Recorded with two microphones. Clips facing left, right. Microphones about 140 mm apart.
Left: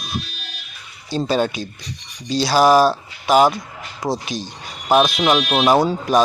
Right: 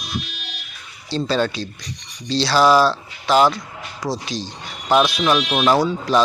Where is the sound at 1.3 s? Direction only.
15° left (ahead or behind).